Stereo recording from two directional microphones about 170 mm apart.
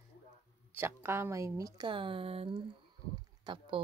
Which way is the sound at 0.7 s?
15° right (ahead or behind).